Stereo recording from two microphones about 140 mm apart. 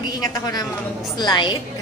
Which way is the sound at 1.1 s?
30° left (ahead or behind).